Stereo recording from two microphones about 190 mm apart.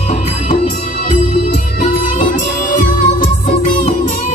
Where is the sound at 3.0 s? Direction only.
45° left (ahead or behind).